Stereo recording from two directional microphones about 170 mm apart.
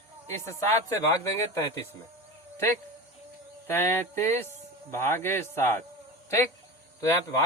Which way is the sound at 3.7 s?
15° left (ahead or behind).